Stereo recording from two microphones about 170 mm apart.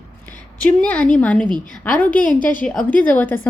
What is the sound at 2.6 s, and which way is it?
Speech, 5° left (ahead or behind).